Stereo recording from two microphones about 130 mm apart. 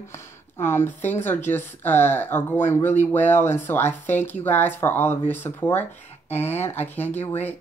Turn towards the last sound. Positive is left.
turn(degrees=15)  # may be behind; listen again after turning